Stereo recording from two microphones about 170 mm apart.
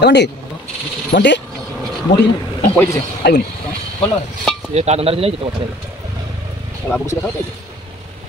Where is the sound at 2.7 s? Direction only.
10° left (ahead or behind).